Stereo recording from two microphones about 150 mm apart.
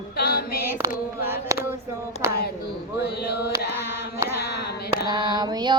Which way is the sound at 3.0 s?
90° left.